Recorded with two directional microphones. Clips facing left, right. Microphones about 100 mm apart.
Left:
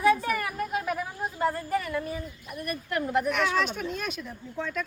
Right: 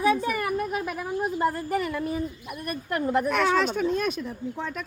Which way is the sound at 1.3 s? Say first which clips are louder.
Left 1 dB; 25° right (ahead or behind).